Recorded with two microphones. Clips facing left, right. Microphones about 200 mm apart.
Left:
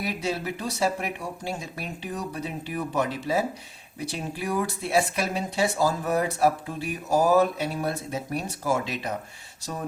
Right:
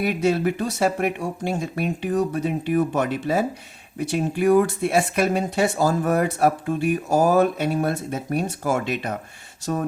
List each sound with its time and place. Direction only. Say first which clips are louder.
0.0 s speech: right 9 dB; 55° right (ahead or behind)